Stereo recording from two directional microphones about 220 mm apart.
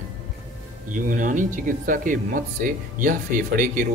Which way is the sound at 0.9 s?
35° right (ahead or behind).